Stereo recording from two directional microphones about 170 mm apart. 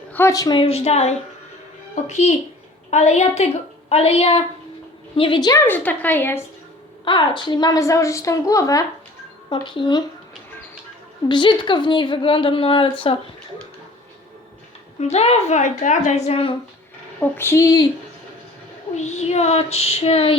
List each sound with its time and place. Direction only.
0.1 s a woman's voice: 15° left (ahead or behind)
7.0 s a woman's voice: 25° left (ahead or behind)
11.3 s a woman's voice: 30° left (ahead or behind)
14.9 s a woman's voice: 40° left (ahead or behind)
17.2 s a woman's voice: 15° left (ahead or behind)
18.9 s a woman's voice: 45° left (ahead or behind)